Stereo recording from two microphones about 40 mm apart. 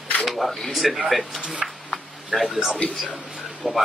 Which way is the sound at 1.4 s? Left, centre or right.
Right.